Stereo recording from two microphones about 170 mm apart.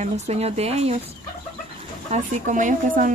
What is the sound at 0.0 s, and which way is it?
Speech, 40° right (ahead or behind).